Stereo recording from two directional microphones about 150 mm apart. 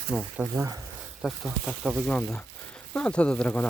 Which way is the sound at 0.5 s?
20° right (ahead or behind).